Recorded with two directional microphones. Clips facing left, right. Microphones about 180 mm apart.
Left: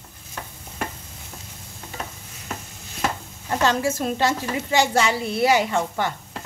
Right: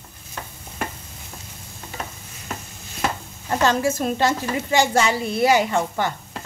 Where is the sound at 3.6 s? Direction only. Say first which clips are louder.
Right 2 dB; 50° right (ahead or behind).